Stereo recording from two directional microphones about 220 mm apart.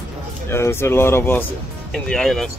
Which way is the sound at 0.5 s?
10° left (ahead or behind).